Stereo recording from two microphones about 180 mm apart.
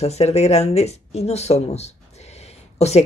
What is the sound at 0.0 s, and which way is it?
Speech, 35° left (ahead or behind).